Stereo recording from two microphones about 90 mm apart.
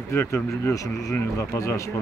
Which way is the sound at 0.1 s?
30° left (ahead or behind).